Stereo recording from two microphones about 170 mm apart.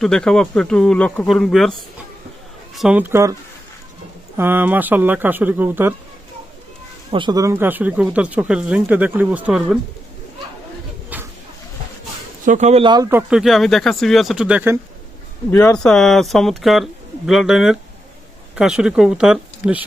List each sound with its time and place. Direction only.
0.0 s speech: 5° left (ahead or behind)
2.7 s speech: 5° right (ahead or behind)
4.4 s speech: 10° right (ahead or behind)
7.1 s speech: 25° right (ahead or behind); by 9.7 s 5° right (ahead or behind)
11.1 s a sound: 10° right (ahead or behind)
12.5 s speech: 45° right (ahead or behind)
12.8 s speech: 25° right (ahead or behind)
13.1 s speech: 10° right (ahead or behind)
13.4 s speech: centre (ahead or behind)
15.7 s speech: 5° left (ahead or behind)